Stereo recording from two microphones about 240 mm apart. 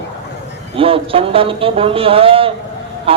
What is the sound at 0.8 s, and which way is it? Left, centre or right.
A man's voice, right.